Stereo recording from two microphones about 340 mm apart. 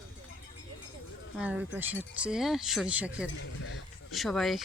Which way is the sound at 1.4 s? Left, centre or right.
Centre.